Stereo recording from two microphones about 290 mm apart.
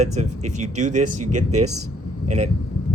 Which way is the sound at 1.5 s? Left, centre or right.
Right.